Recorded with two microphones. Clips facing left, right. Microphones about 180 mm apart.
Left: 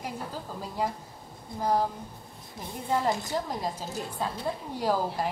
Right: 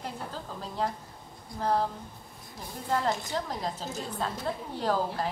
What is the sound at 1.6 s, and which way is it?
Speech, 10° left (ahead or behind).